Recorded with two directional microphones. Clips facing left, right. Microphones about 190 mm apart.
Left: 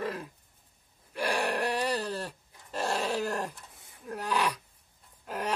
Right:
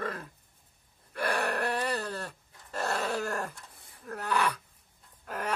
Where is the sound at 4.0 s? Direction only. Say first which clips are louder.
Even; 15° left (ahead or behind).